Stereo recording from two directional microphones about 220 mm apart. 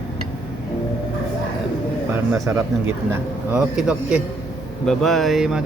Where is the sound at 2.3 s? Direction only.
10° right (ahead or behind).